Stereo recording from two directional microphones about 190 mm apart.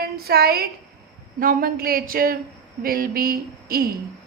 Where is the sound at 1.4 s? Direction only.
50° right (ahead or behind).